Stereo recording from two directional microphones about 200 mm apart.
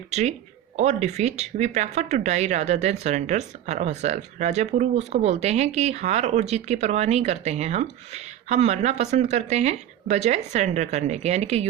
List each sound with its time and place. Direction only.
0.1 s speech: 35° right (ahead or behind)